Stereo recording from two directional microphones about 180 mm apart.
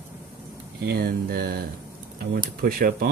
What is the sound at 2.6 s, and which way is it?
Speech, 55° right (ahead or behind).